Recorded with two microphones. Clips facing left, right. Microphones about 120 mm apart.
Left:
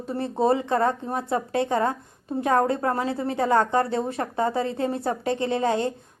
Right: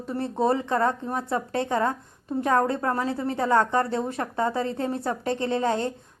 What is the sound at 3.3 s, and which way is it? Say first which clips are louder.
A woman's voice: left 1 dB; 35° left (ahead or behind).